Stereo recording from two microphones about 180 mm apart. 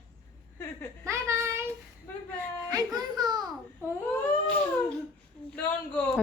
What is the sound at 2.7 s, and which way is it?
Speech, 20° right (ahead or behind).